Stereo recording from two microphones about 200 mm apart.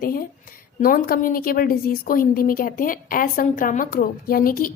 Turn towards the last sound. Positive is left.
turn(degrees=45)  # may be behind; listen again after turning